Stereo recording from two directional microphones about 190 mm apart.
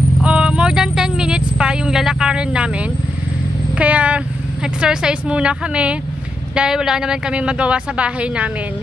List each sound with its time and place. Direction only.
0.2 s a sound: 5° right (ahead or behind)
3.7 s vehicle: 5° right (ahead or behind)
4.8 s speech: 5° right (ahead or behind)